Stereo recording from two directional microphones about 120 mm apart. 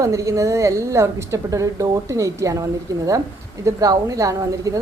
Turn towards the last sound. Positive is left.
turn(degrees=-30)  # may be behind; listen again after turning